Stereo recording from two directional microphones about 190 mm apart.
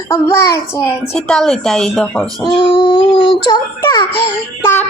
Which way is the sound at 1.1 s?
5° left (ahead or behind).